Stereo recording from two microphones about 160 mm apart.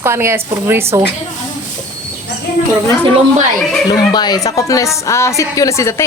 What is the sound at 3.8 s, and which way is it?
A woman's voice, 25° left (ahead or behind).